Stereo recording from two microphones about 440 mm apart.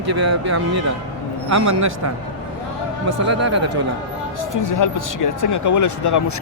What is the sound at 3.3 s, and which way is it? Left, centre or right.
Speech, right.